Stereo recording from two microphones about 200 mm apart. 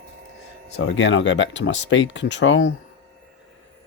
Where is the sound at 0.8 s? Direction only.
70° left (ahead or behind).